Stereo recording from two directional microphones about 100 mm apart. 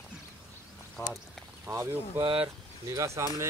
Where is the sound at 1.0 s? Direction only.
30° left (ahead or behind).